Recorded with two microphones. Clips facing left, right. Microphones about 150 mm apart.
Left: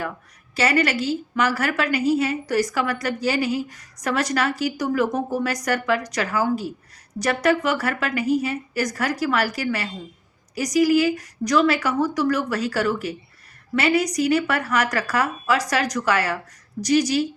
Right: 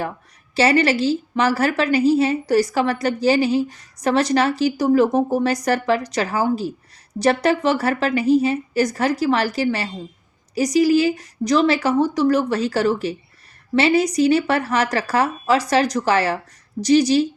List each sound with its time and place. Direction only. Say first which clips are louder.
0.5 s a woman's voice: right 4 dB; 30° right (ahead or behind)